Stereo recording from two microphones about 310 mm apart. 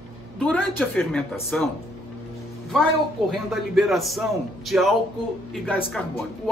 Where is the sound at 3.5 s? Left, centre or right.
Centre.